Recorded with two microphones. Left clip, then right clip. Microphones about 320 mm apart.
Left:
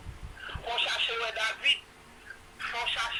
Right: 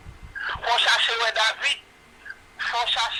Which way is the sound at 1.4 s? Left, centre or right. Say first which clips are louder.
Right 5 dB; centre.